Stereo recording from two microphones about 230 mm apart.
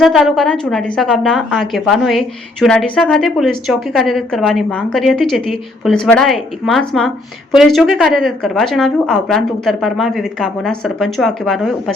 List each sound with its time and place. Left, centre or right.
0.0 s a woman's voice: centre